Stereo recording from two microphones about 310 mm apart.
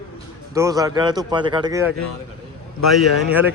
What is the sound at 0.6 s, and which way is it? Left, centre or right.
A man's voice, centre.